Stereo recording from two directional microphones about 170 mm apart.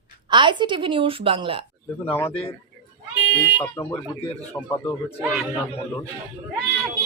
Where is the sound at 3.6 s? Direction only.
15° left (ahead or behind).